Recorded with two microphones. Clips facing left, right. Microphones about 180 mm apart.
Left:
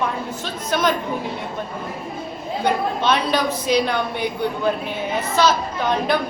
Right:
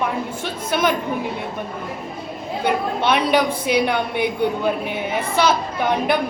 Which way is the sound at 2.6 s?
15° right (ahead or behind).